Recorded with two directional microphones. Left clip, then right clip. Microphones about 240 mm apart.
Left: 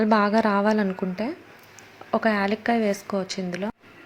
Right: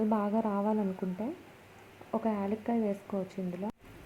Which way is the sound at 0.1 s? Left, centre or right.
Left.